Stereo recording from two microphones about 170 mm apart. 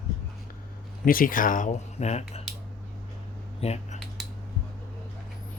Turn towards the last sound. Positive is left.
turn(degrees=0)  # may be behind; listen again after turning